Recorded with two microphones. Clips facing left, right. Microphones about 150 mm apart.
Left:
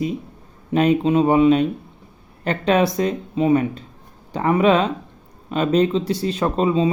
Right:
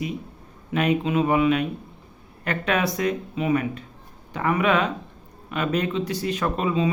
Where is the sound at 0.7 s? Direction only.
30° left (ahead or behind).